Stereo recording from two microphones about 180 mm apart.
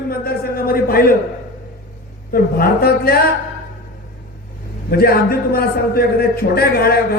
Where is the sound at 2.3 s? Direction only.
55° left (ahead or behind).